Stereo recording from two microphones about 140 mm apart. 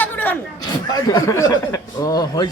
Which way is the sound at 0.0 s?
15° left (ahead or behind).